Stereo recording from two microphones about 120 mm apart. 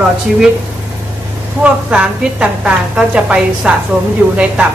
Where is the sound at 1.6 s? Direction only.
10° right (ahead or behind).